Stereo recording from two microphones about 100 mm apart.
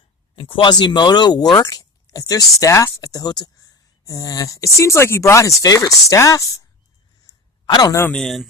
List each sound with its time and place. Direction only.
0.3 s speech: 60° left (ahead or behind); by 6.7 s 35° left (ahead or behind)
7.7 s speech: 40° left (ahead or behind)
8.1 s speech: centre (ahead or behind)